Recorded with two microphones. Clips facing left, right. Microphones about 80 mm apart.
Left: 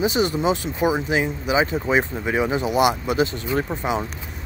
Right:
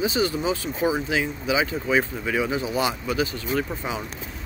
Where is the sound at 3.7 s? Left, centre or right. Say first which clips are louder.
Left 6 dB; left.